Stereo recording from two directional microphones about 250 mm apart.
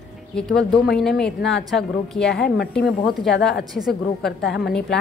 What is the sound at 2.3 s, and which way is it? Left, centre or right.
Speech, left.